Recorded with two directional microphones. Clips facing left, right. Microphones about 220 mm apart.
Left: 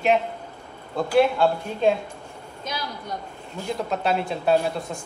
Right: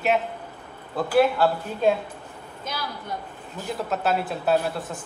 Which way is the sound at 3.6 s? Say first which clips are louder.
Left 1 dB; 5° right (ahead or behind).